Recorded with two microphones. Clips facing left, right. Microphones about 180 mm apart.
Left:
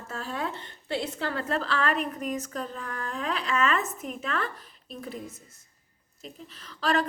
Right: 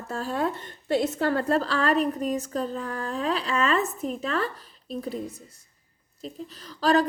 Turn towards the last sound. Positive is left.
turn(degrees=-35)  # may be behind; listen again after turning